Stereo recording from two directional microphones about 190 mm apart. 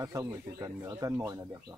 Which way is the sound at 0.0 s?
20° right (ahead or behind).